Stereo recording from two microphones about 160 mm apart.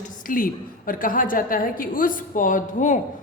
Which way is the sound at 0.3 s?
60° left (ahead or behind).